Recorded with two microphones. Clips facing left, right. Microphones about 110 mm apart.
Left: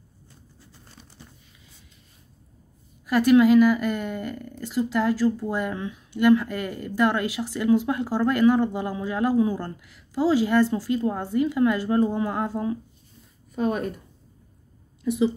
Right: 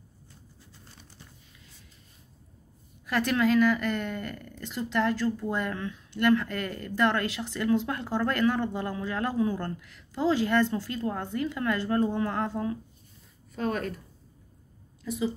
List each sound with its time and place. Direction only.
3.1 s a woman's voice: 10° left (ahead or behind)
15.0 s a woman's voice: 20° left (ahead or behind)